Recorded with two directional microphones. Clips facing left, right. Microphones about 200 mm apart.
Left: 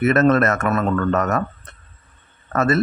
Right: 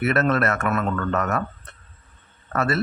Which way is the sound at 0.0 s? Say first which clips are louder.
Left 5 dB; 45° left (ahead or behind).